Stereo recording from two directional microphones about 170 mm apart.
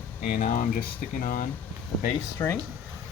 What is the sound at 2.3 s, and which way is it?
Speech, 15° left (ahead or behind).